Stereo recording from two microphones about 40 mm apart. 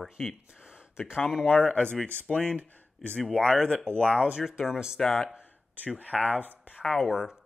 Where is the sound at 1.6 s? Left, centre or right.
Left.